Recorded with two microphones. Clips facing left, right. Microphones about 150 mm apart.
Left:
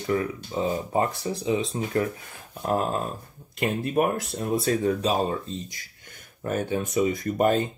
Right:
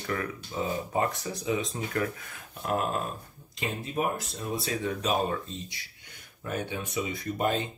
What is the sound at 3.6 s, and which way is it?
Speech, 65° left (ahead or behind).